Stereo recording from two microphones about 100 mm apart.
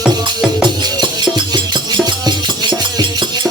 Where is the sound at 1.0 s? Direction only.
45° right (ahead or behind).